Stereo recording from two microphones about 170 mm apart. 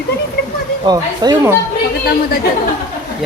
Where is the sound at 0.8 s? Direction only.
25° right (ahead or behind).